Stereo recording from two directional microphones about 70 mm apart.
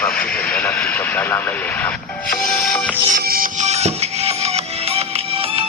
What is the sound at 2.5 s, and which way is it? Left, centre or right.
Music, centre.